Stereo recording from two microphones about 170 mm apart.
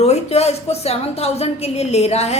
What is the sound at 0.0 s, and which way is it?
A woman's voice, 40° left (ahead or behind).